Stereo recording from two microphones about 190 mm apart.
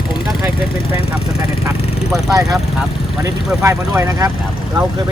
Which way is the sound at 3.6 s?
15° right (ahead or behind).